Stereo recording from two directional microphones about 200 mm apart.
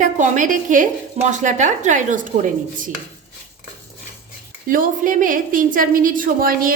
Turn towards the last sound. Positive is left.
turn(degrees=-45)  # may be behind; listen again after turning